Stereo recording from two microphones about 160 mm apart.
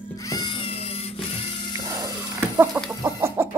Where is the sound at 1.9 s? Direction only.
20° right (ahead or behind).